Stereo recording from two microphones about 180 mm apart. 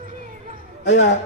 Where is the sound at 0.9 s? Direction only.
90° left.